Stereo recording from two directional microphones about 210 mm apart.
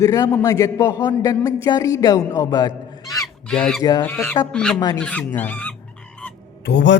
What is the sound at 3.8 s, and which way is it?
Speech, 15° left (ahead or behind).